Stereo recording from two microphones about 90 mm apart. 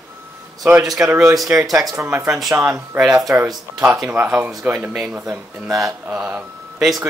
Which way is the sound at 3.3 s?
15° right (ahead or behind).